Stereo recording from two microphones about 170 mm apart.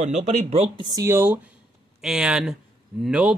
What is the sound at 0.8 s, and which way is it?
Speech, 20° right (ahead or behind).